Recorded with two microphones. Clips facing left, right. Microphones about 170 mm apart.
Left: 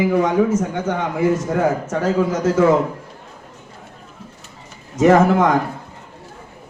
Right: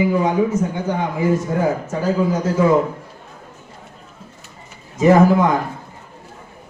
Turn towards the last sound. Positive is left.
turn(degrees=70)  # may be behind; listen again after turning